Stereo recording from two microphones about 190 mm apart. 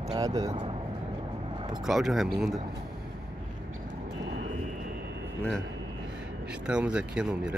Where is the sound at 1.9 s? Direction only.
Centre (ahead or behind).